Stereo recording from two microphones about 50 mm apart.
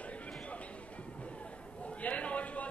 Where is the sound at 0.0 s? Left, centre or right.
Left.